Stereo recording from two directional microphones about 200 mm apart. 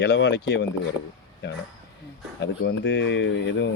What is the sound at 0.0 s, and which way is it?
Speech, 60° left (ahead or behind).